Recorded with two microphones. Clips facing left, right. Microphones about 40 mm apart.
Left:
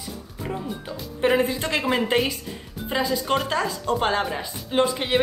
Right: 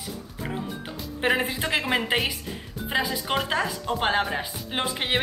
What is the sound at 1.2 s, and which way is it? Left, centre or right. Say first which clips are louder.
A woman's voice: left 3 dB; centre.